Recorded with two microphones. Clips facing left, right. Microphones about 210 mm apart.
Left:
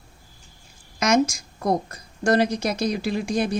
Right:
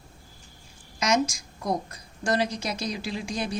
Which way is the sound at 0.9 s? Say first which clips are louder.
Left 5 dB; 55° left (ahead or behind).